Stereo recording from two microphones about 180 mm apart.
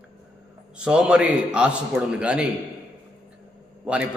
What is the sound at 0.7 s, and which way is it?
A man's voice, 5° right (ahead or behind).